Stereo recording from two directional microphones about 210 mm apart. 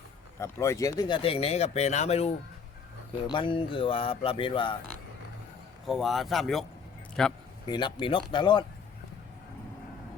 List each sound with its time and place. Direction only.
0.3 s speech: 15° left (ahead or behind)
5.8 s speech: centre (ahead or behind)
7.7 s speech: 20° left (ahead or behind)